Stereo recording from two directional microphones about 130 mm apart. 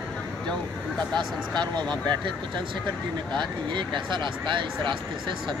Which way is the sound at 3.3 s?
35° right (ahead or behind).